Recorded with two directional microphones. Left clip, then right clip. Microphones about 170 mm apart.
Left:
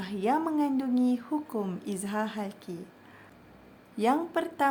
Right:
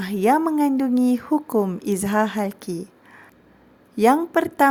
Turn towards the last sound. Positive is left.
turn(degrees=-45)  # may be behind; listen again after turning